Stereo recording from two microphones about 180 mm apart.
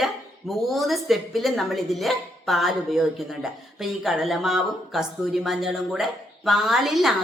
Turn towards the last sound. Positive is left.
turn(degrees=0)  # may be behind; listen again after turning